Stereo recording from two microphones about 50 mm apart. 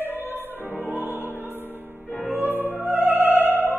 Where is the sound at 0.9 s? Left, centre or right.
Right.